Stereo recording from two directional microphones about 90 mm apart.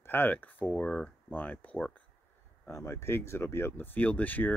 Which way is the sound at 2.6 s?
30° left (ahead or behind).